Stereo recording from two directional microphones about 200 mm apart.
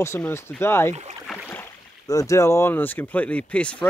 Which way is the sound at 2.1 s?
15° left (ahead or behind).